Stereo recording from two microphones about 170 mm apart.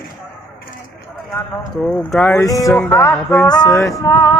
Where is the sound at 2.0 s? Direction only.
Centre (ahead or behind).